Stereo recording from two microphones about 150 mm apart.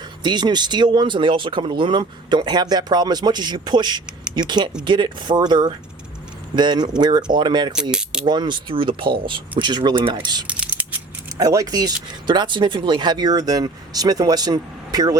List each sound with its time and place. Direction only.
0.2 s speech: 30° right (ahead or behind)
7.8 s mechanisms: 5° right (ahead or behind)
8.2 s speech: 30° right (ahead or behind)
10.4 s mechanisms: 10° right (ahead or behind)
11.3 s speech: 25° right (ahead or behind)